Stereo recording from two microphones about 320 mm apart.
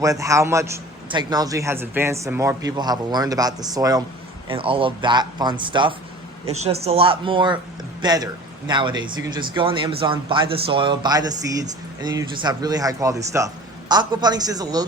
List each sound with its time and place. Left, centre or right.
0.0 s a man's voice: centre